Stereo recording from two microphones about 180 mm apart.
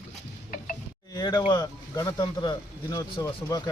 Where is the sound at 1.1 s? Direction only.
20° left (ahead or behind).